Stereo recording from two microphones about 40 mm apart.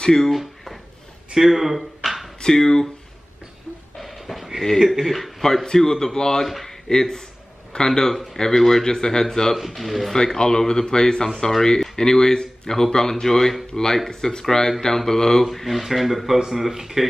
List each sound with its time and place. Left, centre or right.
0.0 s speech: centre
0.3 s a sound: centre
1.3 s speech: centre
2.0 s a sound: centre
2.4 s speech: centre
4.0 s a sound: centre
4.7 s speech: centre
5.0 s speech: centre
6.4 s speech: centre
9.6 s speech: centre
10.1 s speech: centre
15.4 s speech: centre